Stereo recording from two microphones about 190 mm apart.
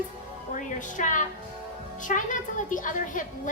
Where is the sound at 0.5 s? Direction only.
40° left (ahead or behind).